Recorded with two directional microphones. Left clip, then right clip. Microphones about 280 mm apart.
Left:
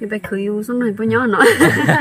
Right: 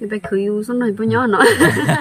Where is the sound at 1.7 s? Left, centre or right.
Centre.